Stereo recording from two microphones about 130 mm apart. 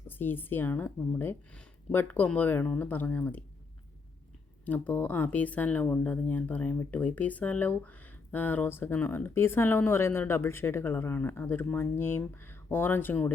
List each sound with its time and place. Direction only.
0.1 s speech: 15° left (ahead or behind)
4.6 s speech: 10° left (ahead or behind)